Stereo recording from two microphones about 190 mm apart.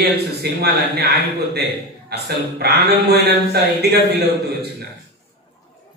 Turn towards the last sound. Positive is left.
turn(degrees=-60)  # may be behind; listen again after turning